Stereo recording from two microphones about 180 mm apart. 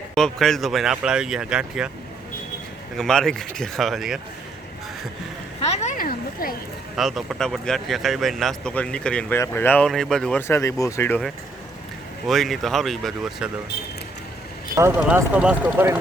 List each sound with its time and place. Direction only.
0.1 s speech: centre (ahead or behind)
3.0 s speech: 5° left (ahead or behind)
6.0 s a sound: 55° left (ahead or behind)
6.9 s speech: centre (ahead or behind); by 11.2 s 15° left (ahead or behind)
12.3 s speech: centre (ahead or behind)
14.8 s speech: 10° right (ahead or behind)